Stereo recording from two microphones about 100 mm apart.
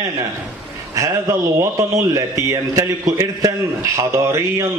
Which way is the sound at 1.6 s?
30° right (ahead or behind).